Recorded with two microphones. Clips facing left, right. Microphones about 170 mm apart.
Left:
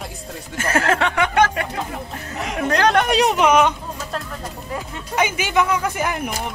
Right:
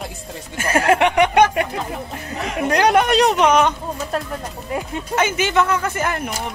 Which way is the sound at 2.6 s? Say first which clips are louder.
Right 1 dB; 15° right (ahead or behind).